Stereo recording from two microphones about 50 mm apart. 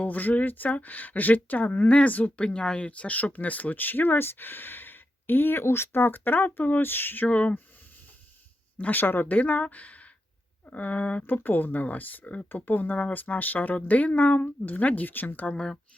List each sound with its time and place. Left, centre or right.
0.0 s speech: left
7.3 s speech: left
8.8 s speech: left
15.5 s speech: centre